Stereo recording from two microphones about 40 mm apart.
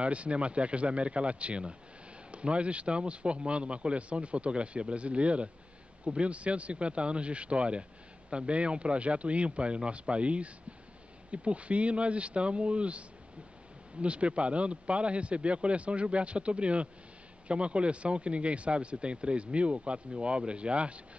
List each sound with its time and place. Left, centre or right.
0.0 s speech: right
14.0 s speech: right